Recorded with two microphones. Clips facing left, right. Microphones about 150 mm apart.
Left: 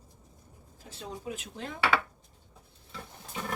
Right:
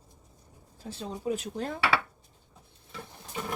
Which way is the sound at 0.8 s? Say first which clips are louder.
Right 7 dB; 35° right (ahead or behind).